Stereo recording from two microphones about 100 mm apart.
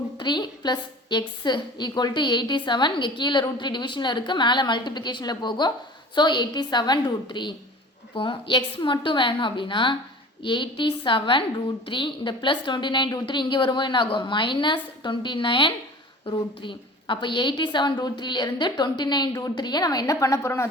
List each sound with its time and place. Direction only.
0.2 s a woman's voice: 50° left (ahead or behind); by 20.7 s 30° left (ahead or behind)